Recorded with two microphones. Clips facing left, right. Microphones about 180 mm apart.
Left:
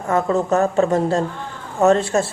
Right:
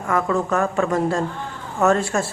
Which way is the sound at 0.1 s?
25° left (ahead or behind).